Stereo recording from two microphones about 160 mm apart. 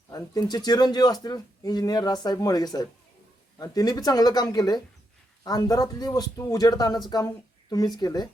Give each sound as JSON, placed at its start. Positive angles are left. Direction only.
{"t": 0.1, "sound": "speech", "side_deg": 25}